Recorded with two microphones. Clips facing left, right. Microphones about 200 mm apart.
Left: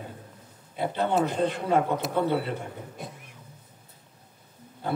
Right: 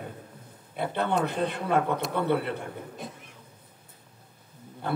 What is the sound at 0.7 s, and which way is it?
Speech, 60° right (ahead or behind).